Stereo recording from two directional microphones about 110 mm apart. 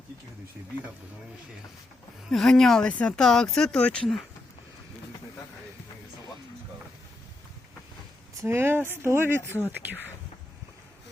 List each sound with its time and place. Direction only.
2.3 s speech: 5° left (ahead or behind)
8.4 s speech: 20° right (ahead or behind)